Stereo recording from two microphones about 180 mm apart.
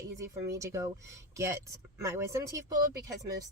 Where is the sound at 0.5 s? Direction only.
15° right (ahead or behind).